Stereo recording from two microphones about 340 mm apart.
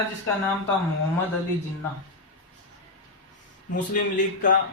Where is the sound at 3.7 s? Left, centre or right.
Left.